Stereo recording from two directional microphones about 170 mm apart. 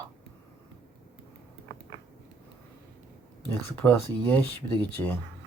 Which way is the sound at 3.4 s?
10° left (ahead or behind).